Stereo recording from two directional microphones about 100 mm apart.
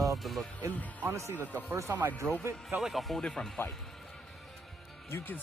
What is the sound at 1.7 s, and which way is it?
Speech, 25° right (ahead or behind).